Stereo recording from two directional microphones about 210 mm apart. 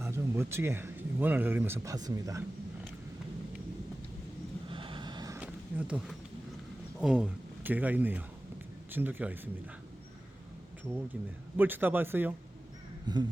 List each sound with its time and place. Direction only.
0.0 s speech: 10° right (ahead or behind)
4.7 s vehicle: 25° right (ahead or behind)
5.4 s a sound: 5° right (ahead or behind)
7.0 s speech: 5° right (ahead or behind)
10.9 s speech: 10° right (ahead or behind)
13.1 s speech: 20° right (ahead or behind)